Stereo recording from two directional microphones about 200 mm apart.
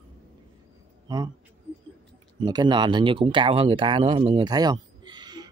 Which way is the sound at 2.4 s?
20° right (ahead or behind).